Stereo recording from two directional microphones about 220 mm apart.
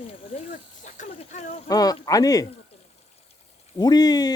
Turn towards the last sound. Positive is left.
turn(degrees=20)  # may be behind; listen again after turning